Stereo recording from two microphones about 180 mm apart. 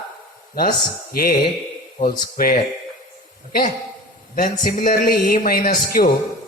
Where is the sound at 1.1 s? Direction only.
55° left (ahead or behind).